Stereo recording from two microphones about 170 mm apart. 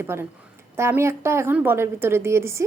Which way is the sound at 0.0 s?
15° right (ahead or behind).